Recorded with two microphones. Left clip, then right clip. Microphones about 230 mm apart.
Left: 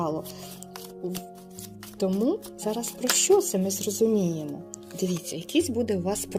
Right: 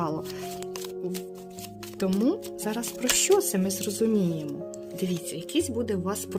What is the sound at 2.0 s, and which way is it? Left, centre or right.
Speech, right.